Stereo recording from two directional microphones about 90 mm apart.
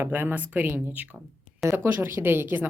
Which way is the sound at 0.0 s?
20° right (ahead or behind).